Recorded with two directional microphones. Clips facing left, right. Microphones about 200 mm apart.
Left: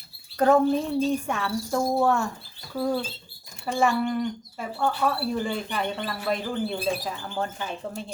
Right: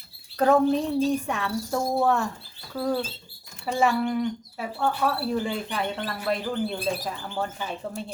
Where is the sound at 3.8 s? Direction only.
5° right (ahead or behind).